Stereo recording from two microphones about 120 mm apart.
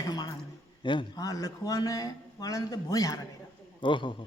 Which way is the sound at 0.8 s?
40° left (ahead or behind).